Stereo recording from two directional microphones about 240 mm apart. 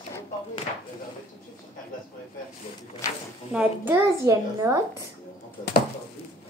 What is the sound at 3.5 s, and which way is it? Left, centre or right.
A child's voice, centre.